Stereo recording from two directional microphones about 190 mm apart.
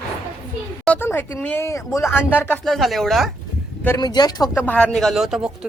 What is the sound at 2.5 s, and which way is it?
Speech, centre (ahead or behind).